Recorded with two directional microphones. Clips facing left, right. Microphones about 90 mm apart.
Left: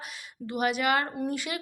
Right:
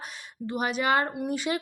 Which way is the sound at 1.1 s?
15° right (ahead or behind).